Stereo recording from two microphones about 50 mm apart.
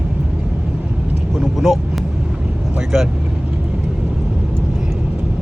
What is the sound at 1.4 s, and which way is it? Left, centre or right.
Vehicle, centre.